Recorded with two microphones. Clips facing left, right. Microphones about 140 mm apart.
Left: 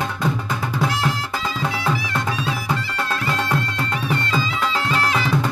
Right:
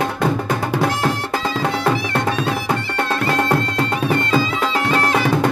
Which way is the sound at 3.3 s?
55° right (ahead or behind).